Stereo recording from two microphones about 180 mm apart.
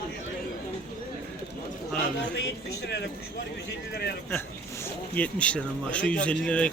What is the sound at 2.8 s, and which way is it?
Speech, 70° left (ahead or behind).